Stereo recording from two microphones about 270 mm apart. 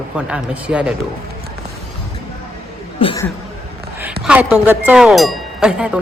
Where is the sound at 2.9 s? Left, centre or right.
Centre.